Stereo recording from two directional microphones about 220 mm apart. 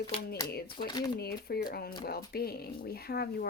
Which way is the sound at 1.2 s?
45° left (ahead or behind).